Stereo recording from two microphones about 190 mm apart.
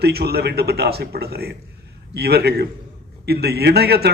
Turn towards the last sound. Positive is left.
turn(degrees=-55)  # may be behind; listen again after turning